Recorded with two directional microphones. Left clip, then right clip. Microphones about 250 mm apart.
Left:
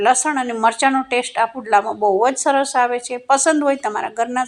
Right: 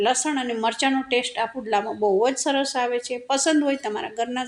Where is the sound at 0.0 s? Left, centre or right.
Centre.